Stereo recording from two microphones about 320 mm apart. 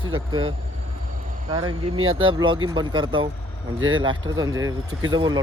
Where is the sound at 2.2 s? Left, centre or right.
Centre.